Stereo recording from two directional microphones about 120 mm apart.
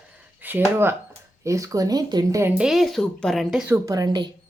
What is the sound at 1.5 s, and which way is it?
Speech, 25° right (ahead or behind).